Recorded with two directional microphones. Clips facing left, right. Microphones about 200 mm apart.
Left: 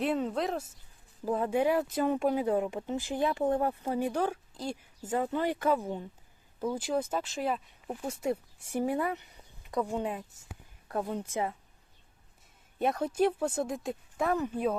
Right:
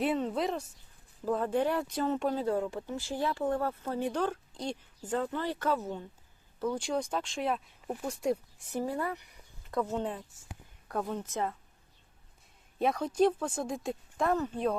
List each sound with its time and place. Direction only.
0.0 s speech: centre (ahead or behind)
1.2 s speech: 10° left (ahead or behind)
12.8 s speech: 5° left (ahead or behind)